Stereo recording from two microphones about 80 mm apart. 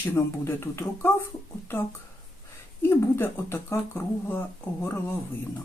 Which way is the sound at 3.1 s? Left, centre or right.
Left.